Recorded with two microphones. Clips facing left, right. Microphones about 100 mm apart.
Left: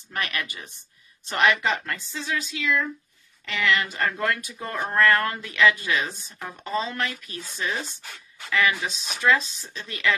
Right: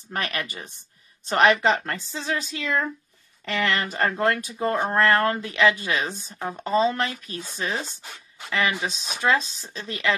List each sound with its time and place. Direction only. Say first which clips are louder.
0.1 s speech: right 1 dB; 35° right (ahead or behind)